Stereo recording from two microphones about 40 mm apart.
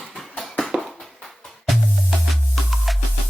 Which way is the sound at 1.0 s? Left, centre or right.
Centre.